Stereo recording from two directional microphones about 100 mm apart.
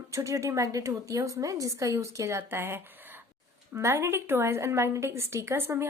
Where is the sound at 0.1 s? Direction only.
30° right (ahead or behind).